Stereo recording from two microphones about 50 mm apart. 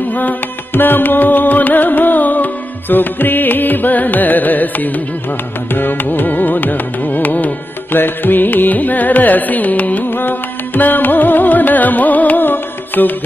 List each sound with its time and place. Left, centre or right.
0.1 s music: left